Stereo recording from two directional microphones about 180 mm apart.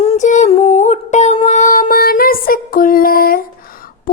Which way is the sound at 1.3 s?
40° left (ahead or behind).